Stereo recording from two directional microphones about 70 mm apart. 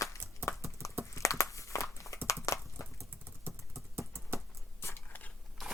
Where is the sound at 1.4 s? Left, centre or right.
Left.